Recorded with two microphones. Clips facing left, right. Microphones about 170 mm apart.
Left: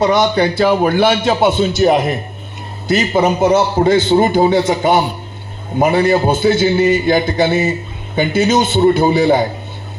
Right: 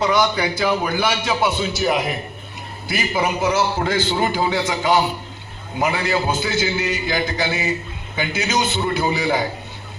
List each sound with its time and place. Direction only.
0.6 s a man's voice: 55° left (ahead or behind)